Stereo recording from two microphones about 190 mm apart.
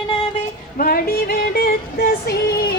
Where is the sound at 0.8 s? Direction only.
50° left (ahead or behind).